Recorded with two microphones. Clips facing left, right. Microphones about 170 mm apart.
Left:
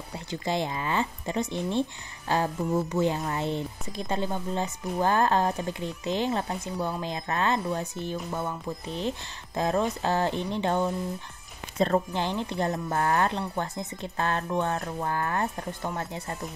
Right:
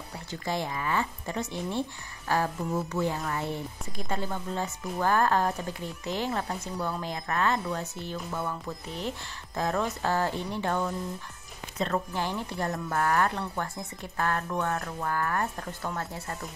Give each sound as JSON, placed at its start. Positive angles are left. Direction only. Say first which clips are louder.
{"t": 0.1, "sound": "speech", "louder": "left 3 dB", "side_deg": 20}
{"t": 12.1, "sound": "speech", "louder": "left 3 dB", "side_deg": 20}